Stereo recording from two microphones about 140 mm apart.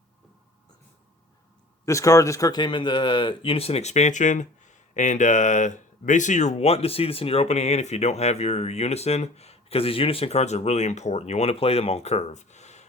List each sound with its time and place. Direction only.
1.8 s speech: 20° left (ahead or behind); by 12.8 s 55° left (ahead or behind)